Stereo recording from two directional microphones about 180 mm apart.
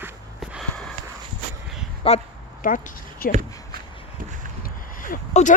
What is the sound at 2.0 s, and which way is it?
Speech, 30° left (ahead or behind).